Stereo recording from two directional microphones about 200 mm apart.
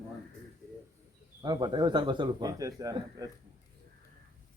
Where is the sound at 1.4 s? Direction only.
20° right (ahead or behind).